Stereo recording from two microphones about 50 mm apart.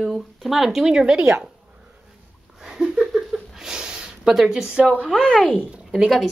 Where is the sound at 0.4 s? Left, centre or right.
Centre.